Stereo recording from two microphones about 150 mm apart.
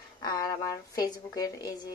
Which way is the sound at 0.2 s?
25° left (ahead or behind).